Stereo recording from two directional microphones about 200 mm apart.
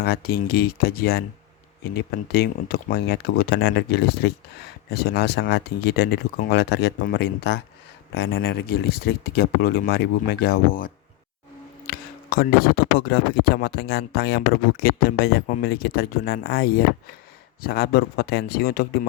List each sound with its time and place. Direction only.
0.0 s speech: 50° left (ahead or behind)